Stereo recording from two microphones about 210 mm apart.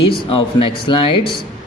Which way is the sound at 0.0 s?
25° left (ahead or behind).